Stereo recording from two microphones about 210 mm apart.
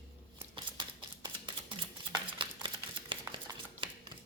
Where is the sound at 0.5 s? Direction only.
20° right (ahead or behind).